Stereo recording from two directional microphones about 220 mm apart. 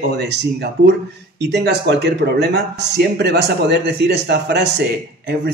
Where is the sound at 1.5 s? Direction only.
50° right (ahead or behind).